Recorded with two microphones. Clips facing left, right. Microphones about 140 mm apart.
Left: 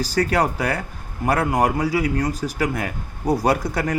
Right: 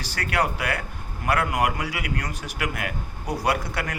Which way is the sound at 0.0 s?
35° left (ahead or behind).